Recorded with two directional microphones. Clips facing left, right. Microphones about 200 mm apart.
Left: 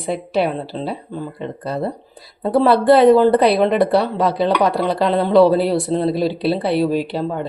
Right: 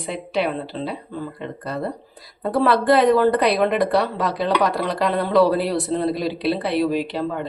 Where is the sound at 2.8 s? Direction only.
30° left (ahead or behind).